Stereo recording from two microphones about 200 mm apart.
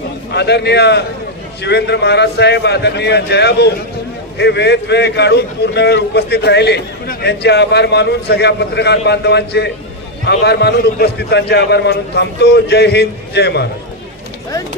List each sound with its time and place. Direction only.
0.3 s a man's voice: 55° left (ahead or behind)